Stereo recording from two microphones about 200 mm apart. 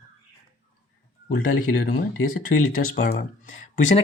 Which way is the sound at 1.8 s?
40° left (ahead or behind).